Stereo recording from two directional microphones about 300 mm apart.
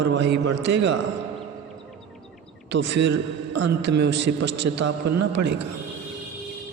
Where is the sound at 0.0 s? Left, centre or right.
Right.